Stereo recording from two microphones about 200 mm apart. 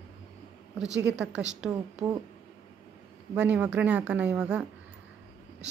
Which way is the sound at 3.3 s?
5° right (ahead or behind).